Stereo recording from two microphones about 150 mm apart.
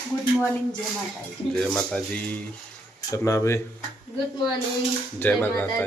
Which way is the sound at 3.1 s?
20° left (ahead or behind).